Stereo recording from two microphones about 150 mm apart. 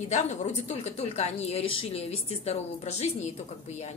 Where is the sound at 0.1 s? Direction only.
50° left (ahead or behind).